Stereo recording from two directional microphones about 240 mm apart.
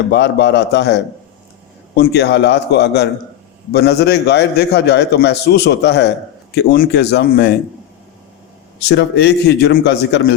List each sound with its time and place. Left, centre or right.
0.1 s a man's voice: left
8.8 s a man's voice: left